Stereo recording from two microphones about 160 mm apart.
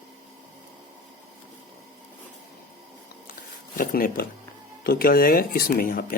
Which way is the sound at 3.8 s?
60° left (ahead or behind).